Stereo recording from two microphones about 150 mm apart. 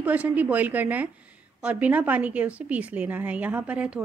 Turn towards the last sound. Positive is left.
turn(degrees=-10)  # may be behind; listen again after turning